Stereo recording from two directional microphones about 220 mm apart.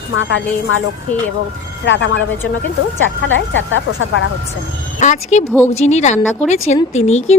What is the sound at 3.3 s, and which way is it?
Speech, 60° left (ahead or behind).